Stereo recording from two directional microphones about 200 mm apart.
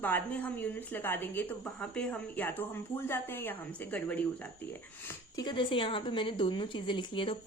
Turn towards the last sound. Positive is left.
turn(degrees=25)  # may be behind; listen again after turning